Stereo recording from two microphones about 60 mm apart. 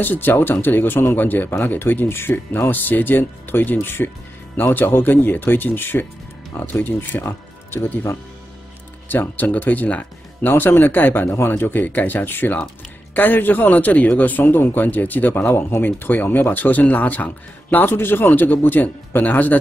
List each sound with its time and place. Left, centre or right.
0.0 s speech: left
9.1 s speech: left
10.5 s speech: left